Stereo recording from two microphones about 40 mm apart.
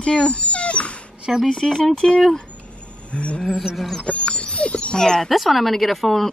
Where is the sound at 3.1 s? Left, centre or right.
Left.